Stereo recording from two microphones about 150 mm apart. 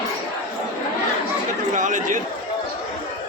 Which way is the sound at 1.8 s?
55° right (ahead or behind).